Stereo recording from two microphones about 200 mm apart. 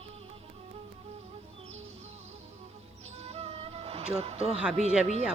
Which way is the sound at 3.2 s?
30° right (ahead or behind).